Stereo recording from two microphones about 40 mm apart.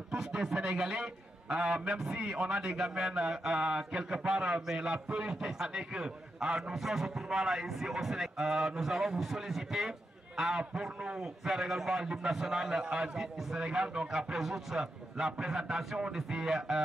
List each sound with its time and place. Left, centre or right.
0.3 s a man's voice: right
13.2 s a man's voice: centre